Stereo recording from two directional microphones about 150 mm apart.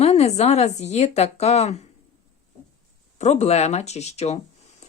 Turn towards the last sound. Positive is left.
turn(degrees=45)  # may be behind; listen again after turning